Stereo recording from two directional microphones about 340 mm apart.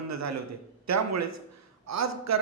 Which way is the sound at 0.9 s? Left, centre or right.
Right.